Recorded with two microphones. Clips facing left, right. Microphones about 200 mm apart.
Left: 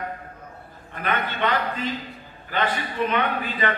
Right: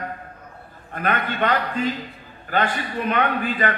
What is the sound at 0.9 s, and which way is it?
A man's voice, 45° right (ahead or behind).